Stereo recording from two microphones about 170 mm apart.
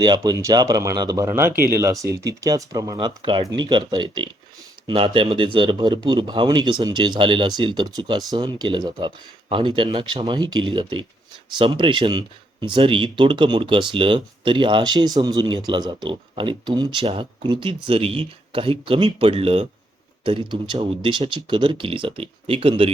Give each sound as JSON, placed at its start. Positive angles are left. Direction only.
{"t": 0.0, "sound": "speech", "side_deg": -25}